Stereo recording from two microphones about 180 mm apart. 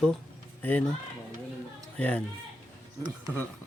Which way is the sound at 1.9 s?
5° left (ahead or behind).